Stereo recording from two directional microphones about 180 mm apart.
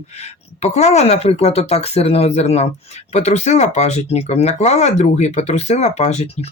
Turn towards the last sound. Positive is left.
turn(degrees=35)  # may be behind; listen again after turning